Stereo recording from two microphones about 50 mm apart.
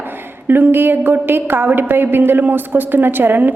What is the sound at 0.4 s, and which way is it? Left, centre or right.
A woman's voice, right.